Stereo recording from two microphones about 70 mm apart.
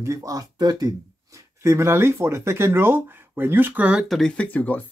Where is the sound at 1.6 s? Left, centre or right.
Right; by 4.0 s centre.